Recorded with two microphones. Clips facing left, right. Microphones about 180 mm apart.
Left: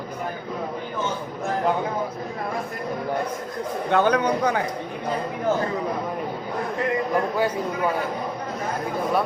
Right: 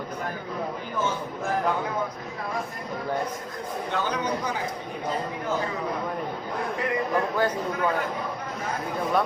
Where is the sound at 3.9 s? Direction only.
60° left (ahead or behind).